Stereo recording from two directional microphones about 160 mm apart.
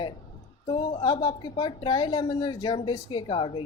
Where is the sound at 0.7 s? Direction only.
30° left (ahead or behind).